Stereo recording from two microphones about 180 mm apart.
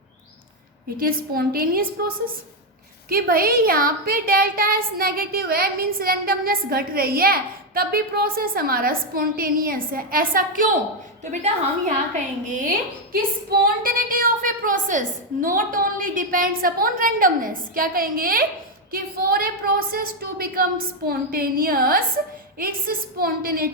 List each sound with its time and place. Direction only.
0.9 s a woman's voice: 55° right (ahead or behind)